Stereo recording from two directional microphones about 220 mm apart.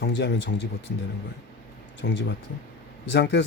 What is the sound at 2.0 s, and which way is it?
Speech, 55° left (ahead or behind).